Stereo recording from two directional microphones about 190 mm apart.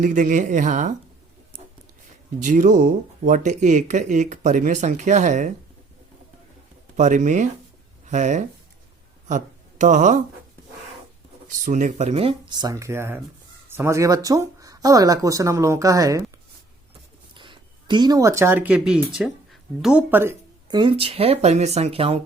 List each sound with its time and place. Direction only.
0.0 s speech: 45° right (ahead or behind)
2.4 s speech: 40° right (ahead or behind)
6.9 s speech: 40° right (ahead or behind)
11.6 s speech: 40° right (ahead or behind); by 16.2 s 15° right (ahead or behind)
17.3 s speech: 25° right (ahead or behind)
20.7 s speech: 25° right (ahead or behind)